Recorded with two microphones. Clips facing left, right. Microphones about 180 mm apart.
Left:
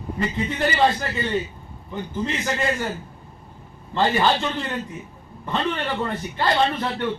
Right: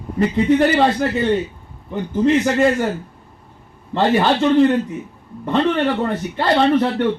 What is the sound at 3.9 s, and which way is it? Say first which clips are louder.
Speech: right 5 dB; 65° right (ahead or behind).